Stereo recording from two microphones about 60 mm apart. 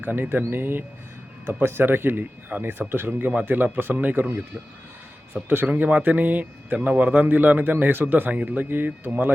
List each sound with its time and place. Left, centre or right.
0.0 s speech: right
5.5 s a man's voice: right